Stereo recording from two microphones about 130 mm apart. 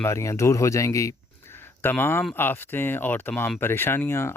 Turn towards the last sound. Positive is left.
turn(degrees=20)  # may be behind; listen again after turning